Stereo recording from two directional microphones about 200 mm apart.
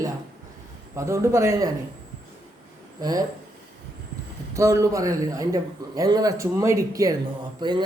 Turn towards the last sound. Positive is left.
turn(degrees=-20)  # may be behind; listen again after turning